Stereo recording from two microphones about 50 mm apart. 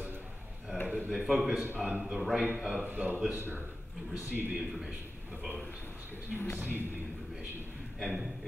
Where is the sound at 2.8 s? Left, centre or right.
Right.